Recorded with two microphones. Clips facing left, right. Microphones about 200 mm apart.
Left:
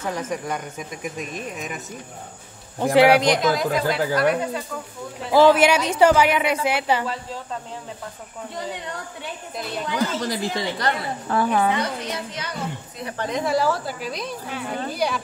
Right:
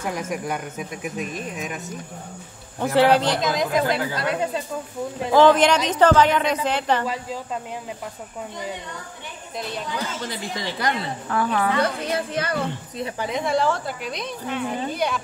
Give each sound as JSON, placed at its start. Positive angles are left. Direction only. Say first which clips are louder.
{"t": 0.0, "sound": "speech", "louder": "even", "side_deg": -10}
{"t": 2.8, "sound": "a woman's voice", "louder": "left 2 dB", "side_deg": 15}
{"t": 3.4, "sound": "speech", "louder": "left 1 dB", "side_deg": -20}
{"t": 5.3, "sound": "a woman's voice", "louder": "even", "side_deg": 10}
{"t": 10.2, "sound": "speech", "louder": "left 5 dB", "side_deg": 35}
{"t": 10.8, "sound": "a woman's voice", "louder": "right 1 dB", "side_deg": -10}
{"t": 11.4, "sound": "a woman's voice", "louder": "left 1 dB", "side_deg": 20}
{"t": 11.8, "sound": "a woman's voice", "louder": "right 4 dB", "side_deg": -55}
{"t": 13.2, "sound": "speech", "louder": "left 1 dB", "side_deg": 0}